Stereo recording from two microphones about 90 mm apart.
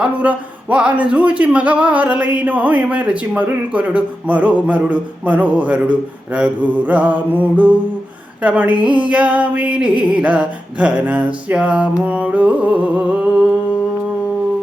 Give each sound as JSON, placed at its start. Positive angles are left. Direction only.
{"t": 0.0, "sound": "speech", "side_deg": -15}